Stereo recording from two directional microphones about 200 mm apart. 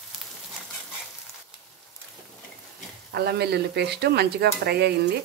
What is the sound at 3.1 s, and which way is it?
Speech, 50° right (ahead or behind).